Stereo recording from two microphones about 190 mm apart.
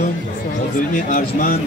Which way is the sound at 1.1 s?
45° left (ahead or behind).